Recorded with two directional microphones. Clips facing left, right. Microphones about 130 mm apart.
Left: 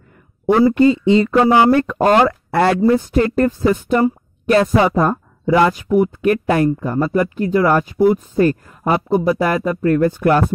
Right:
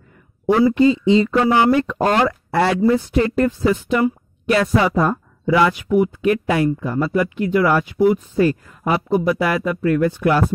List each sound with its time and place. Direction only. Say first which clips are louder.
0.5 s speech: left 2 dB; 45° left (ahead or behind)
1.4 s speech: left 3 dB; 35° left (ahead or behind)
4.0 s a woman's voice: left 2 dB; 35° left (ahead or behind)